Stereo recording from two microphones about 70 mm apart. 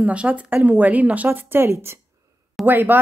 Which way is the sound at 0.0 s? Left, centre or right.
Centre.